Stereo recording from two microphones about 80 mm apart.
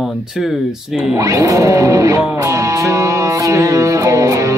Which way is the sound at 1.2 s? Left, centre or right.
Right.